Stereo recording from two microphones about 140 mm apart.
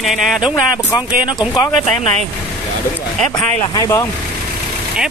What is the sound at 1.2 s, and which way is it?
Speech, 30° left (ahead or behind).